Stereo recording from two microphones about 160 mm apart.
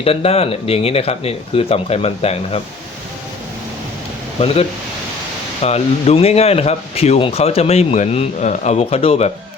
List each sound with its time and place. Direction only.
0.0 s speech: 35° left (ahead or behind)
4.4 s speech: 40° left (ahead or behind)
5.6 s speech: 40° left (ahead or behind)